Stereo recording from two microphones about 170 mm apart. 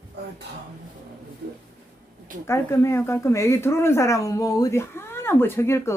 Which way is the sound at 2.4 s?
15° left (ahead or behind).